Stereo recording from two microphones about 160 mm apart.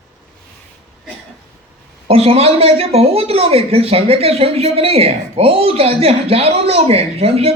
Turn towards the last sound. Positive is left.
turn(degrees=-40)  # may be behind; listen again after turning